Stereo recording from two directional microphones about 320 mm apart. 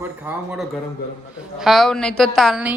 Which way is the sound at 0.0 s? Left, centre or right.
Centre.